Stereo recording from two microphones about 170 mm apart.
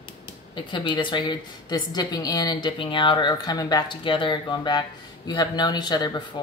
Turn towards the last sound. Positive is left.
turn(degrees=25)  # may be behind; listen again after turning